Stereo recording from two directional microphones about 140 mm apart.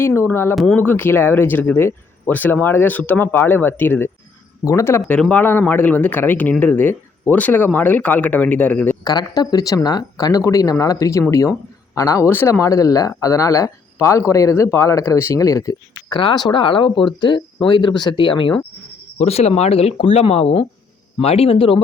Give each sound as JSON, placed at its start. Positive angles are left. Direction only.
{"t": 0.0, "sound": "speech", "side_deg": 15}
{"t": 0.5, "sound": "speech", "side_deg": 0}
{"t": 0.8, "sound": "speech", "side_deg": 15}
{"t": 9.0, "sound": "speech", "side_deg": 30}
{"t": 19.2, "sound": "speech", "side_deg": 50}